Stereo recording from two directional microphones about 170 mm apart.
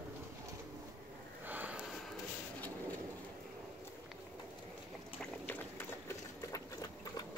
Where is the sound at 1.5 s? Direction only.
10° right (ahead or behind).